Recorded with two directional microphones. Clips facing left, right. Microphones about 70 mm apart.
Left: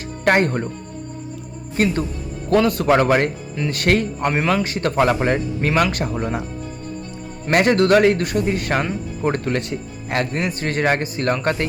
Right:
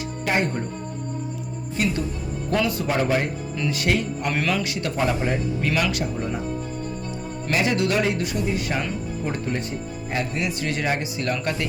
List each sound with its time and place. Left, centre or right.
0.3 s a man's voice: left
1.7 s a man's voice: left
3.7 s speech: left
4.3 s a man's voice: left
5.0 s a man's voice: left
5.6 s speech: left
6.1 s speech: left
7.5 s speech: left
10.3 s speech: left